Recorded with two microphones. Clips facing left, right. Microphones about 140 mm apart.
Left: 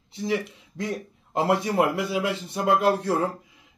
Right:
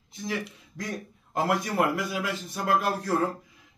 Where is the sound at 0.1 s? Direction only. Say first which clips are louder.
Left 6 dB; 30° left (ahead or behind).